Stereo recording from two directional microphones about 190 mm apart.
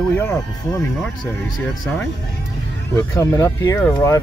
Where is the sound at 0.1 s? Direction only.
10° left (ahead or behind).